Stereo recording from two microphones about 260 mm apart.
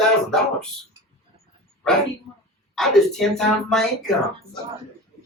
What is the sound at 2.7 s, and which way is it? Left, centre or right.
Speech, centre.